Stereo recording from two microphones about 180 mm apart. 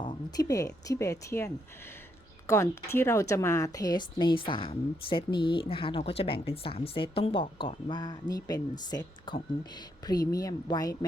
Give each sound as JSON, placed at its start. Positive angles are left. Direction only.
{"t": 0.0, "sound": "a woman's voice", "side_deg": 25}
{"t": 2.9, "sound": "a woman's voice", "side_deg": 15}